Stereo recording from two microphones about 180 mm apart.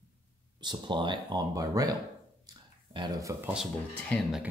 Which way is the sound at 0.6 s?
25° right (ahead or behind).